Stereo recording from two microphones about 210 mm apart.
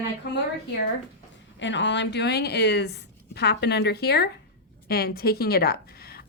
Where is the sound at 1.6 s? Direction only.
60° left (ahead or behind).